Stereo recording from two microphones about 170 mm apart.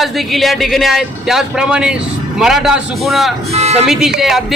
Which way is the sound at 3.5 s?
40° right (ahead or behind).